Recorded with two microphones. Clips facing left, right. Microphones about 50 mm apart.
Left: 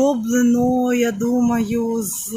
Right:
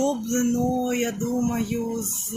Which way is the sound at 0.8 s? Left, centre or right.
Left.